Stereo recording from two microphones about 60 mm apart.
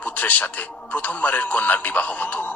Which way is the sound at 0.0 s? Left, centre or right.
Left.